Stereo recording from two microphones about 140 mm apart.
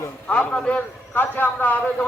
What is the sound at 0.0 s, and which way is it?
A man's voice, 10° left (ahead or behind).